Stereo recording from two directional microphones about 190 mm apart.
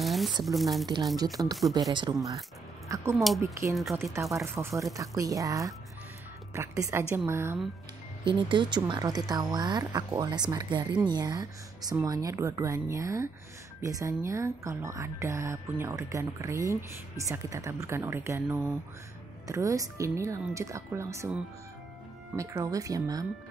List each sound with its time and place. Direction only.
0.0 s a sound: centre (ahead or behind)
0.6 s speech: centre (ahead or behind)
1.1 s speech: 20° right (ahead or behind)
8.3 s speech: 25° right (ahead or behind)